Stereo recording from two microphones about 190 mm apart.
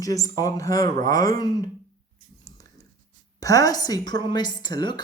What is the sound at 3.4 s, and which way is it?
A woman's voice, 20° left (ahead or behind).